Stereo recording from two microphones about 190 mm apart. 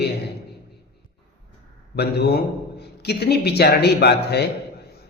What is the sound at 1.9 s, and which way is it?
A man's voice, 60° left (ahead or behind).